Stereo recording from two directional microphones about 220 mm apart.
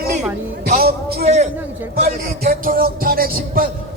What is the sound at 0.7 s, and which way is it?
A man's voice, 45° right (ahead or behind).